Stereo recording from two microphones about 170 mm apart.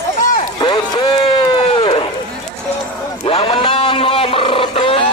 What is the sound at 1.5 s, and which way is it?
Run, 35° left (ahead or behind).